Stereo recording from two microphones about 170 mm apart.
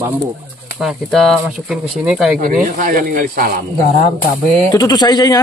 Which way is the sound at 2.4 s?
50° right (ahead or behind).